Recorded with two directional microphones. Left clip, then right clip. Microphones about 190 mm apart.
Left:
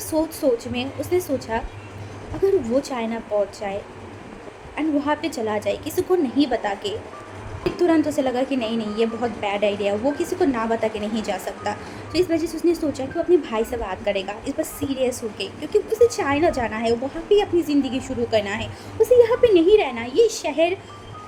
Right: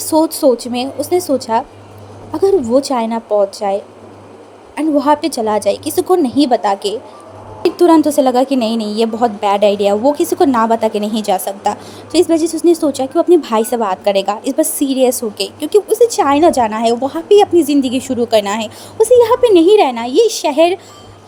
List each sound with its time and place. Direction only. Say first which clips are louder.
0.1 s a woman's voice: right 9 dB; 40° right (ahead or behind)